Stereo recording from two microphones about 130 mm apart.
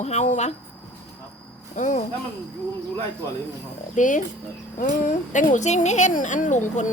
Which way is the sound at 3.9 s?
80° left.